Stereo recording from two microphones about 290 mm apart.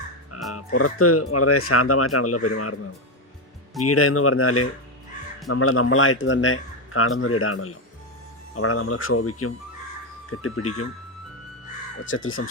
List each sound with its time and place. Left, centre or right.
0.3 s frog: left
0.8 s a man's voice: left
3.8 s a man's voice: left
12.1 s a man's voice: left